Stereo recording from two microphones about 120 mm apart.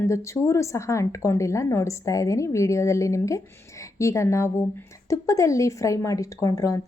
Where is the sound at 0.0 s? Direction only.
25° left (ahead or behind).